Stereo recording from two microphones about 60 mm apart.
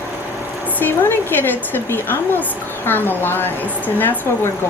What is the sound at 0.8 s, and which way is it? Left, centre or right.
Speech, left.